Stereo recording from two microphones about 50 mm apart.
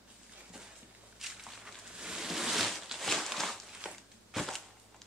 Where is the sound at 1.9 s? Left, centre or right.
Centre.